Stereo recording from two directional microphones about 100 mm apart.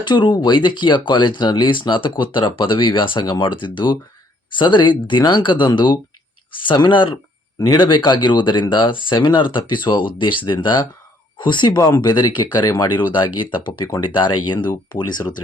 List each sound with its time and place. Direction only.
0.0 s speech: 50° left (ahead or behind)